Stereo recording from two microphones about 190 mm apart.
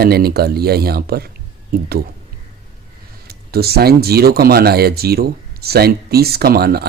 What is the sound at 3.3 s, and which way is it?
Speech, 55° right (ahead or behind).